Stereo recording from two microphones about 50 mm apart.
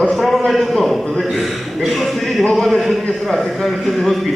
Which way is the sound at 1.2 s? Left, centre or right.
Centre.